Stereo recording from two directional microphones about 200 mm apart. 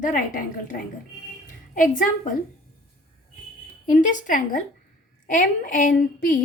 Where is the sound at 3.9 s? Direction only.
40° left (ahead or behind).